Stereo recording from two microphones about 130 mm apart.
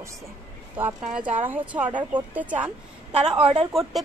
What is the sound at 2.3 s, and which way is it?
Speech, 10° right (ahead or behind).